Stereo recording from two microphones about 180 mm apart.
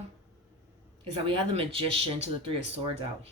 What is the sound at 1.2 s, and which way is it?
Speech, 30° right (ahead or behind).